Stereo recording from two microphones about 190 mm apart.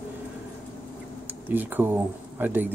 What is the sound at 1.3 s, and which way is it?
Speech, 10° right (ahead or behind).